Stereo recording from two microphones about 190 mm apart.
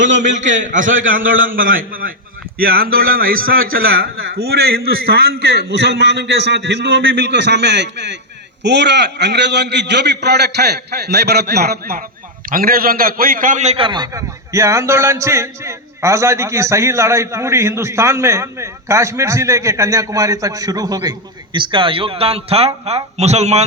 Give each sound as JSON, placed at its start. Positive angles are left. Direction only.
{"t": 0.0, "sound": "a man's voice", "side_deg": -40}